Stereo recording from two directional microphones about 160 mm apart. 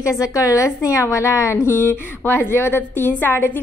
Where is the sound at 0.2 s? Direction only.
20° left (ahead or behind).